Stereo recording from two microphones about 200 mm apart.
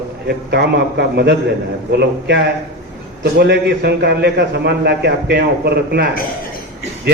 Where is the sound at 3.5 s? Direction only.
60° right (ahead or behind).